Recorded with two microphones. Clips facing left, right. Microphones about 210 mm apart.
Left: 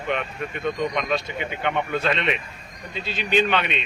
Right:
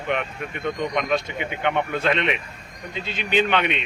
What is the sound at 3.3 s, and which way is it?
Speech, 15° right (ahead or behind).